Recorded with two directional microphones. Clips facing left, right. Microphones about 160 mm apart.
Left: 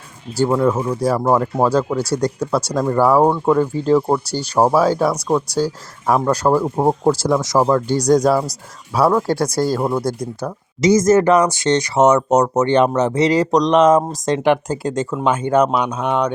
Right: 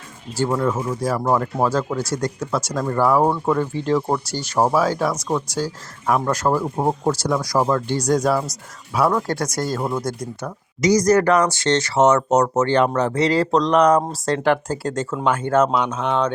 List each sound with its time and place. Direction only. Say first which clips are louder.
0.7 s speech: left 4 dB; 35° left (ahead or behind)
7.6 s speech: left 4 dB; 35° left (ahead or behind); by 16.3 s 15° left (ahead or behind)